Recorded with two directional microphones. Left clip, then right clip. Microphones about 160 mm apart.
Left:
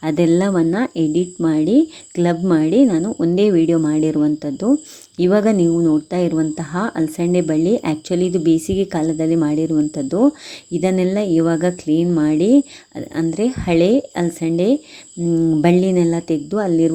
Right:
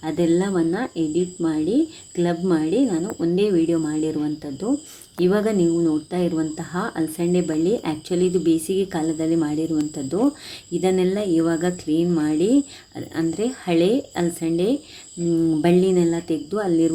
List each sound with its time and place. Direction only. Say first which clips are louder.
0.0 s speech: left 5 dB; 55° left (ahead or behind)